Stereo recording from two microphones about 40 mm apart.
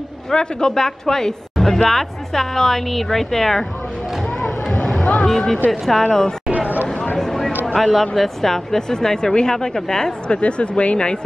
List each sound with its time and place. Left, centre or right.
0.3 s a woman's voice: centre
4.9 s a sound: left
5.2 s speech: centre
7.2 s a sound: centre
7.6 s a woman's voice: centre
10.2 s speech: left